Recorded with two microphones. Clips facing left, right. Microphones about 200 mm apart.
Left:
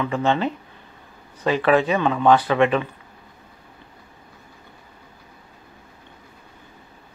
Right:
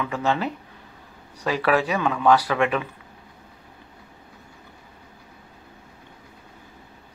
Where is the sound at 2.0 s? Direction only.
30° left (ahead or behind).